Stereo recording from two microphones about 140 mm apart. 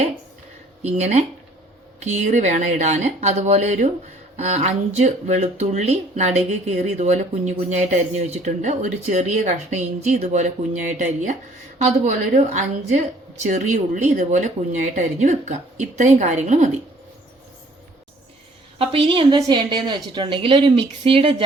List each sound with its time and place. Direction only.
0.8 s speech: 50° right (ahead or behind)
18.8 s speech: 40° right (ahead or behind)